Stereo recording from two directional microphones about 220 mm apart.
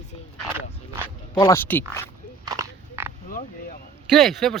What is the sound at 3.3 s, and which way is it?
Speech, 40° left (ahead or behind).